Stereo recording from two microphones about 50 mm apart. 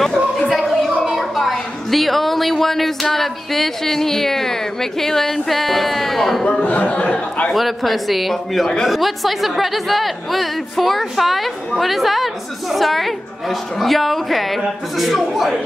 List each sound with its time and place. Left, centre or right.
0.5 s a sound: centre
1.1 s a woman's voice: centre
6.6 s a man's voice: left
7.5 s a woman's voice: centre